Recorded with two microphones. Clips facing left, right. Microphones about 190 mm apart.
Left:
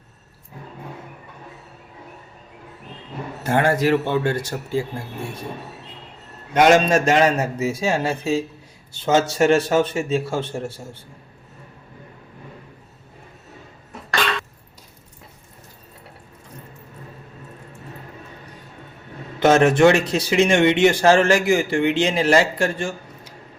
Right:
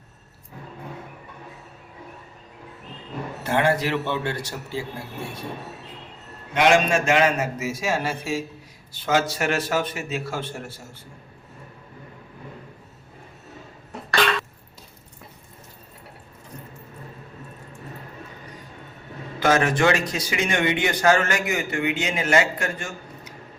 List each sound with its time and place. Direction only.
3.4 s a man's voice: 45° left (ahead or behind)
6.5 s a man's voice: 40° left (ahead or behind)
19.4 s a man's voice: 25° left (ahead or behind)